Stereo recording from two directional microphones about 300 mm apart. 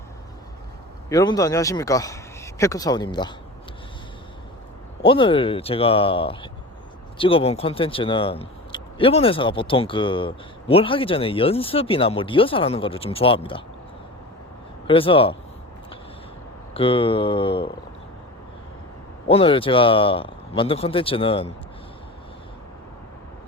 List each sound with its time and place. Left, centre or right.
1.1 s speech: centre
5.0 s speech: centre
14.8 s speech: centre
16.7 s speech: centre
19.3 s speech: centre